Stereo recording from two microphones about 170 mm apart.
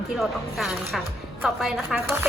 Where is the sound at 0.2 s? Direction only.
Centre (ahead or behind).